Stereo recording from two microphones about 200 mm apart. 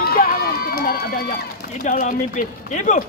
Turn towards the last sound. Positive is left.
turn(degrees=40)  # may be behind; listen again after turning